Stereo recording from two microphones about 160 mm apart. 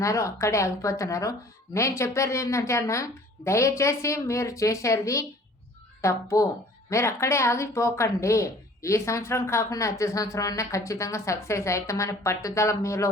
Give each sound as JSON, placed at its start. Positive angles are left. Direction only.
{"t": 0.0, "sound": "speech", "side_deg": 20}